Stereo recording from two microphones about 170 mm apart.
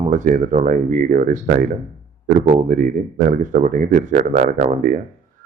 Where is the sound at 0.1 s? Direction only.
45° right (ahead or behind).